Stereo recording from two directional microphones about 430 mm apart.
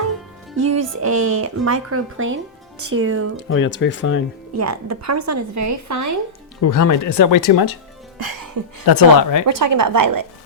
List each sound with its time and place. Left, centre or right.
0.5 s speech: right
3.5 s speech: left
4.5 s speech: right
6.6 s speech: left
8.9 s speech: left
9.5 s a woman's voice: right